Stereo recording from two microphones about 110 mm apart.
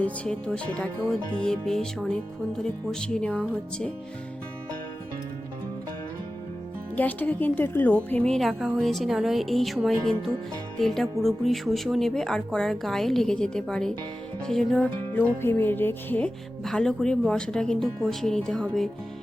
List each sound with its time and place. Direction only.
0.0 s music: 10° left (ahead or behind)
6.9 s speech: 15° left (ahead or behind)
15.1 s music: 20° left (ahead or behind)
16.6 s music: 5° left (ahead or behind)
18.1 s speech: 5° left (ahead or behind)